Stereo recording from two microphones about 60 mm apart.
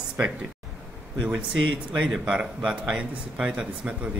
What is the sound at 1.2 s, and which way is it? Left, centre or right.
Speech, centre.